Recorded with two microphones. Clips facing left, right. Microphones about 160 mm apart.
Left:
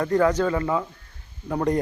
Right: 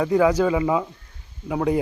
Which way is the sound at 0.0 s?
10° right (ahead or behind).